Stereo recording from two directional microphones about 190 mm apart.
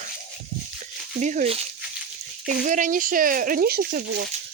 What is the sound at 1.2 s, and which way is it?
Speech, 40° right (ahead or behind).